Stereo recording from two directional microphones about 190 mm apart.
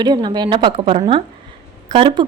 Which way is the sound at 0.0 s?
25° right (ahead or behind).